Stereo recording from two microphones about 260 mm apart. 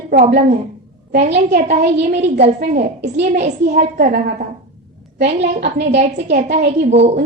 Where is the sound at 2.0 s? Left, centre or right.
Right.